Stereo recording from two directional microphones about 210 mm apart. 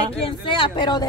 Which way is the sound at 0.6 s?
20° left (ahead or behind).